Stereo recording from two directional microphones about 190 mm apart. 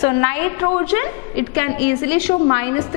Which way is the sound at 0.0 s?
15° left (ahead or behind).